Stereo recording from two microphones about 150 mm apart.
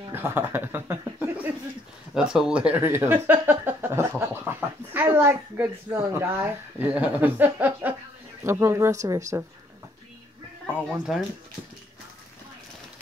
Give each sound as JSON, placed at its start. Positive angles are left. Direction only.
{"t": 0.1, "sound": "speech", "side_deg": -15}
{"t": 10.7, "sound": "speech", "side_deg": -5}